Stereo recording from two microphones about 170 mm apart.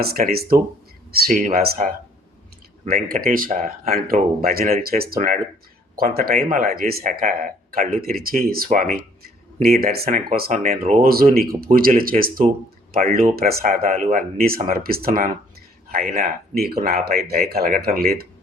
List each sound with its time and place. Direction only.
0.0 s speech: 60° right (ahead or behind)
1.1 s speech: 50° right (ahead or behind)
1.6 s speech: 65° right (ahead or behind)
10.5 s speech: 45° right (ahead or behind); by 18.3 s 65° right (ahead or behind)